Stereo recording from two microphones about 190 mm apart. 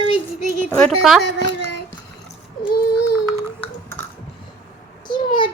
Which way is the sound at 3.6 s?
10° left (ahead or behind).